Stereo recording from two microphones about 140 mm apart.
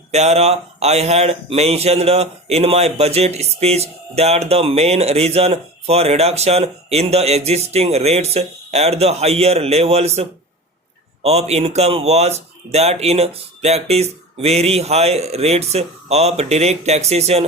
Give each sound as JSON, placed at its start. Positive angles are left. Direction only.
{"t": 0.1, "sound": "speech", "side_deg": -50}